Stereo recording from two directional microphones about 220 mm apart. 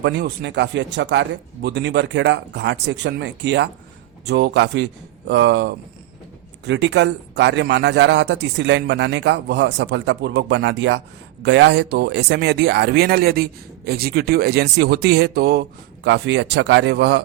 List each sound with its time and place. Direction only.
0.0 s a man's voice: 50° right (ahead or behind)